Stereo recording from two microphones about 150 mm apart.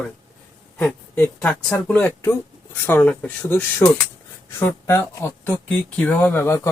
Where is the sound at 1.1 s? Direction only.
10° left (ahead or behind).